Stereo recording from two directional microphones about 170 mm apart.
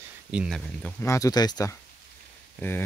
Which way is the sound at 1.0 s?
20° left (ahead or behind).